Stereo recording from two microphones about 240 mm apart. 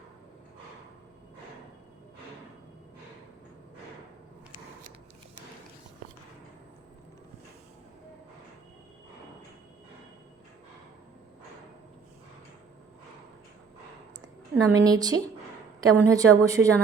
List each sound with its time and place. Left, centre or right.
14.6 s a woman's voice: centre